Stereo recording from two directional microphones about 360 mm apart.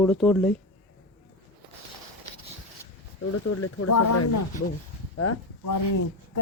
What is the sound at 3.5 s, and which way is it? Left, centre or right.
Speech, left.